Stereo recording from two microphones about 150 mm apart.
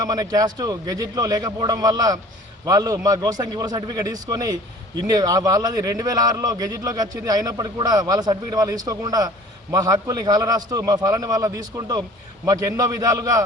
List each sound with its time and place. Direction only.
0.0 s a man's voice: 25° right (ahead or behind)